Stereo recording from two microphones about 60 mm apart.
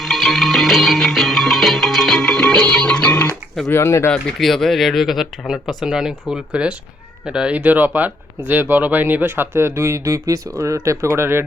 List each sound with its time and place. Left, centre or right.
0.0 s music: centre; by 3.3 s left
3.7 s speech: left
4.4 s speech: centre; by 10.8 s right
10.8 s speech: right